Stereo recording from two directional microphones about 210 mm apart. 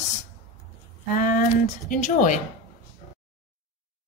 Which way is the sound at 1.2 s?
40° left (ahead or behind).